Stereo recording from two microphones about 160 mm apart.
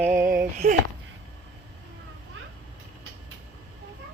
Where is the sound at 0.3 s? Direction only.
55° right (ahead or behind).